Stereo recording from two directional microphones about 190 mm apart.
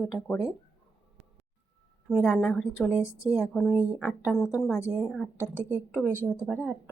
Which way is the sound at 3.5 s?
5° right (ahead or behind).